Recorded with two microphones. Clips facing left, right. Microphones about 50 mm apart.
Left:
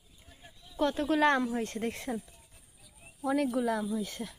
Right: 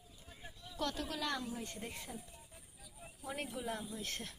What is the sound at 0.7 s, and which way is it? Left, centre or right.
Speech, left.